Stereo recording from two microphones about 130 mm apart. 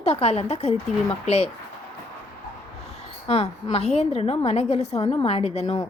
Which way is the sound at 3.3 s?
50° left (ahead or behind).